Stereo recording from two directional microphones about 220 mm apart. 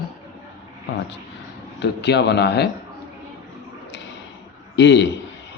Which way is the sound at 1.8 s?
50° left (ahead or behind).